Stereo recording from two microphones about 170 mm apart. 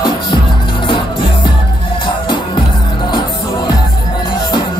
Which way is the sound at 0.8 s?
30° left (ahead or behind).